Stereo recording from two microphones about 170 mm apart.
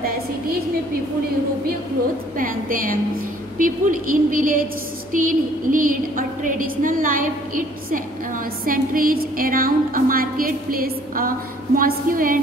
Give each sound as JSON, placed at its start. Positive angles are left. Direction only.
{"t": 2.3, "sound": "a woman's voice", "side_deg": -55}
{"t": 3.5, "sound": "a sound", "side_deg": -55}
{"t": 8.6, "sound": "a woman's voice", "side_deg": -55}